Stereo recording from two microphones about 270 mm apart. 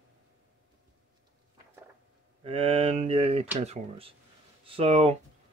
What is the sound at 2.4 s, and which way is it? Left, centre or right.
A man's voice, right.